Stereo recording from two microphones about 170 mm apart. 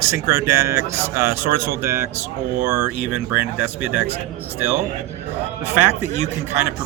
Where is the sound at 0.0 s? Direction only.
20° right (ahead or behind).